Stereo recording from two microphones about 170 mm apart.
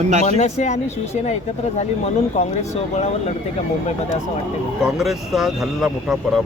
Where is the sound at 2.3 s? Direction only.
40° left (ahead or behind).